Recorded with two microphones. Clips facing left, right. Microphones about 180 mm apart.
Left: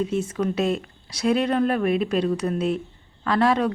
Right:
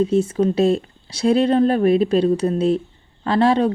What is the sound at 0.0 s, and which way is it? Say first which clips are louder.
A woman's voice: right 7 dB; 30° right (ahead or behind).